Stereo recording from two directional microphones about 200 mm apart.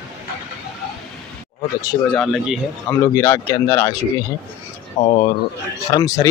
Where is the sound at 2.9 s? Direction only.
15° left (ahead or behind).